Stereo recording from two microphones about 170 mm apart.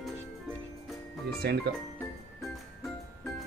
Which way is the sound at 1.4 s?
75° right (ahead or behind).